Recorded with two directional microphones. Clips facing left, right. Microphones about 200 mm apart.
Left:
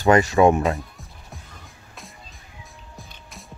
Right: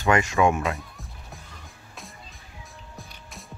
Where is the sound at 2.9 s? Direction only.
Centre (ahead or behind).